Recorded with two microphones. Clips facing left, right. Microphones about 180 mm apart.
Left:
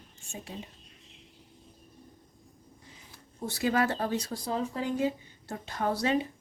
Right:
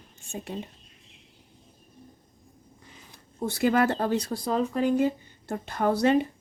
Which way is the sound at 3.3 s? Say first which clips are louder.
Right 5 dB; 55° right (ahead or behind).